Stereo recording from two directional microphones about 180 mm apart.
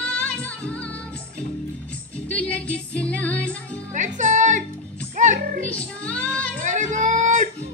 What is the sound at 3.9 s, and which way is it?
Music, 45° right (ahead or behind).